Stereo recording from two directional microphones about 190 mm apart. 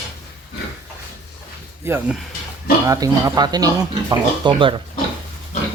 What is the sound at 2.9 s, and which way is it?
Speech, 20° right (ahead or behind).